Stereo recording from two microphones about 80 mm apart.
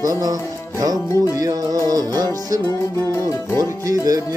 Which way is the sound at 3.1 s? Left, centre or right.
Left.